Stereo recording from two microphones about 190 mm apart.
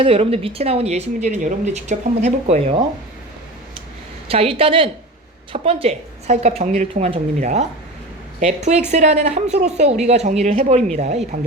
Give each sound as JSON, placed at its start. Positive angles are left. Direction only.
{"t": 0.0, "sound": "speech", "side_deg": -30}
{"t": 4.3, "sound": "a woman's voice", "side_deg": -30}